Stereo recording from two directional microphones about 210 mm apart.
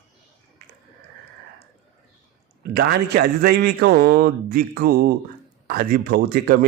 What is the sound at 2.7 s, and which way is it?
A man's voice, 50° right (ahead or behind).